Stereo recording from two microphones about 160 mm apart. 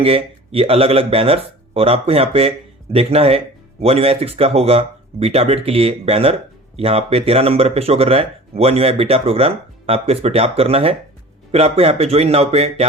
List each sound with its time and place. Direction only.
0.0 s speech: 35° right (ahead or behind)